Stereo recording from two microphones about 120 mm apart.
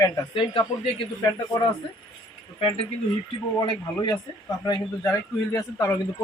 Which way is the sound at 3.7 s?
35° left (ahead or behind).